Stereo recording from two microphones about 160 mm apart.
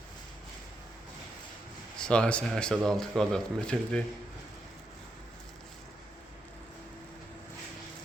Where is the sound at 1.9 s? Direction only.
5° left (ahead or behind).